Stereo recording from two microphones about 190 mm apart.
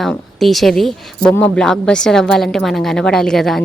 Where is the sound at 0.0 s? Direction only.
Centre (ahead or behind).